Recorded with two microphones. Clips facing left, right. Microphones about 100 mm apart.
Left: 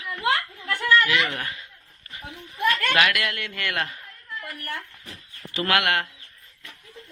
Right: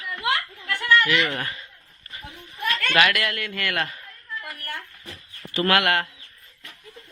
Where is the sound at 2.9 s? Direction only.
10° left (ahead or behind).